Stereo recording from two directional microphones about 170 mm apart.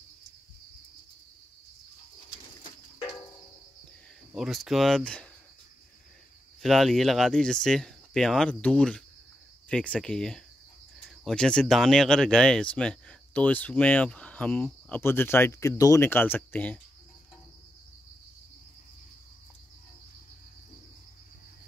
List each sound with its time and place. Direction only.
4.3 s speech: centre (ahead or behind)
6.6 s speech: centre (ahead or behind)